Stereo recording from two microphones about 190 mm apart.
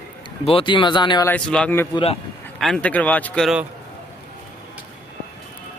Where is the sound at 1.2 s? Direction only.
5° left (ahead or behind).